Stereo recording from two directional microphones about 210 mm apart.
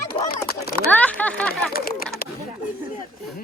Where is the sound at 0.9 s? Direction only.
5° left (ahead or behind).